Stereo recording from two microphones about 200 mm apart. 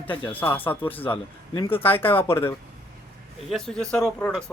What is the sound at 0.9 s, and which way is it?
Speech, 25° left (ahead or behind).